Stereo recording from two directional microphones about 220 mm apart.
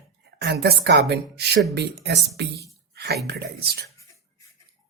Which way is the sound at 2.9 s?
45° right (ahead or behind).